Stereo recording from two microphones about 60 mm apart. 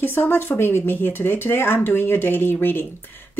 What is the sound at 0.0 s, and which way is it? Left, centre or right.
Speech, left.